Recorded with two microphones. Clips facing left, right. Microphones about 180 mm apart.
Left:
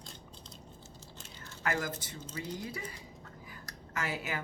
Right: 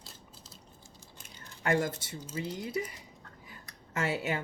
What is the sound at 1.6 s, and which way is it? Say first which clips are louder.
Speech: right 5 dB; 25° right (ahead or behind).